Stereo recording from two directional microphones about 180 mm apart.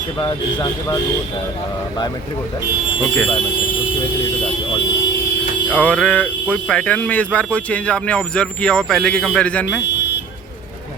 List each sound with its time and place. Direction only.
0.2 s speech: 20° left (ahead or behind)
5.7 s speech: 5° left (ahead or behind)